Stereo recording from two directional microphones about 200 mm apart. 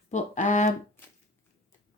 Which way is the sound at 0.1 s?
35° left (ahead or behind).